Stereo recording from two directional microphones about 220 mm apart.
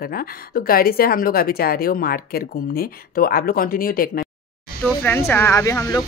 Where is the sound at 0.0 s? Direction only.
40° left (ahead or behind).